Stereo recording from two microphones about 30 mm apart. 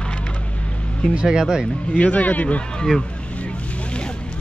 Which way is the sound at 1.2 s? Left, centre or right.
Centre.